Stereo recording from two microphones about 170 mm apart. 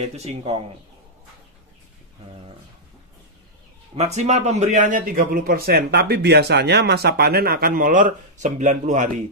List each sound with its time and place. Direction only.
0.0 s speech: 40° right (ahead or behind)
3.9 s a man's voice: 40° right (ahead or behind)